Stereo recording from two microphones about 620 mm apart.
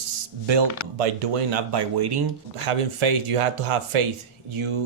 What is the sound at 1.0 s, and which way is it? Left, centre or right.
Speech, right.